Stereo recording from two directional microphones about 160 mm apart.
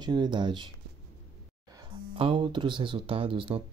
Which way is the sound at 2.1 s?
35° right (ahead or behind).